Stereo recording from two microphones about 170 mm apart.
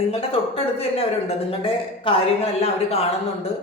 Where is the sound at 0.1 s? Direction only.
35° left (ahead or behind).